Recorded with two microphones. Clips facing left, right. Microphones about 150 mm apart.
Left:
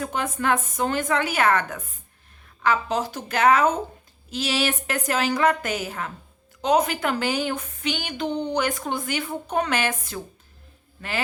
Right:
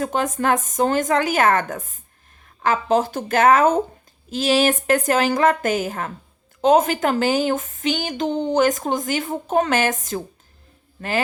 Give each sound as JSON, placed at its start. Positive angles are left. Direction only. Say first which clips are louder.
{"t": 0.0, "sound": "a woman's voice", "louder": "right 5 dB", "side_deg": -45}